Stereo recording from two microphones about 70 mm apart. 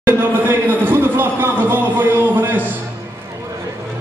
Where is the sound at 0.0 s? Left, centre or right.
Right.